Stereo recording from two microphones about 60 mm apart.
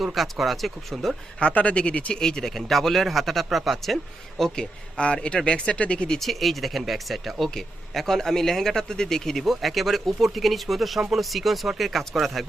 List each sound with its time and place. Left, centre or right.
0.0 s speech: centre
1.4 s speech: left
2.2 s speech: centre
6.1 s speech: centre